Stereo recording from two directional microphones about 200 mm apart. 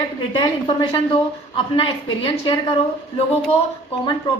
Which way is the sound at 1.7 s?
25° left (ahead or behind).